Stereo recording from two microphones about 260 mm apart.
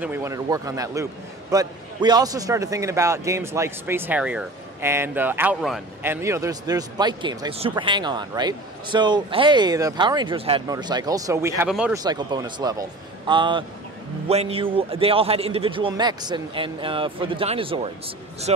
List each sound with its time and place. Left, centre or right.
0.0 s a man's voice: centre
12.0 s a man's voice: centre